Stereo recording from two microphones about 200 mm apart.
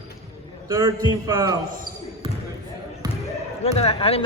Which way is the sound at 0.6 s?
15° right (ahead or behind).